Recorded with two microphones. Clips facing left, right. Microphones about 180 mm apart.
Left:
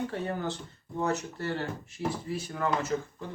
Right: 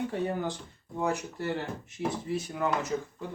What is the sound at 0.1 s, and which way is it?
Speech, 15° right (ahead or behind).